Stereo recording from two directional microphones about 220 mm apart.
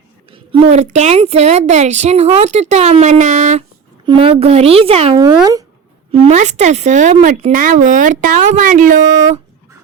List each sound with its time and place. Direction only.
0.3 s a woman's voice: 25° right (ahead or behind)